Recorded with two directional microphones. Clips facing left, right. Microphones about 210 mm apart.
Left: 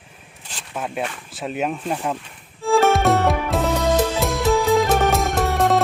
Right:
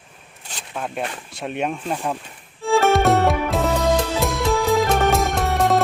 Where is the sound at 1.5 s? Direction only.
Centre (ahead or behind).